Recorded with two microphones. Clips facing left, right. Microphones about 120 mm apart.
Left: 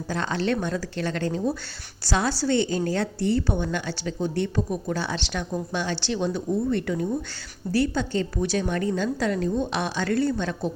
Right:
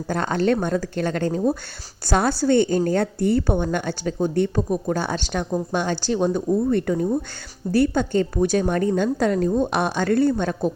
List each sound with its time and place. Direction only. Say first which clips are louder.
0.1 s a woman's voice: right 5 dB; 50° right (ahead or behind)
7.7 s a woman's voice: right 5 dB; 50° right (ahead or behind)